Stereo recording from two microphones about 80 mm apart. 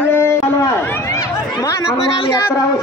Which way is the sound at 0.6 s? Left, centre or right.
Left.